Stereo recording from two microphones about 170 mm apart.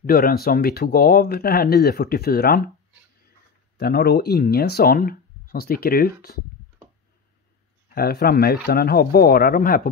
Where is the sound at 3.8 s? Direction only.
65° left (ahead or behind).